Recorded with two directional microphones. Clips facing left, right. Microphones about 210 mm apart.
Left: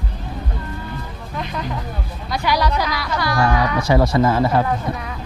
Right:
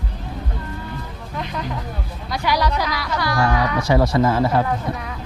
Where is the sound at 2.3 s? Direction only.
15° left (ahead or behind).